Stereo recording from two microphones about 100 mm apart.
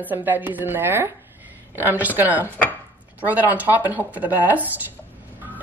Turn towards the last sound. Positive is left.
turn(degrees=-15)  # may be behind; listen again after turning